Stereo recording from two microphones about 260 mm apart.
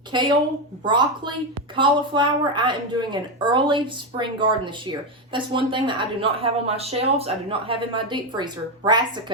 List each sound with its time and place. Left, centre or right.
0.1 s a woman's voice: centre